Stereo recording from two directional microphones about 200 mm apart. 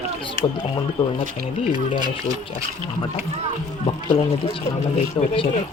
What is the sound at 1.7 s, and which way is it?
Speech, 20° right (ahead or behind).